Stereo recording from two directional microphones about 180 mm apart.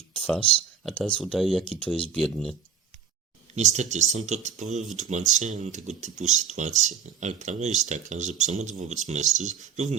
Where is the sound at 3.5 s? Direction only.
40° right (ahead or behind).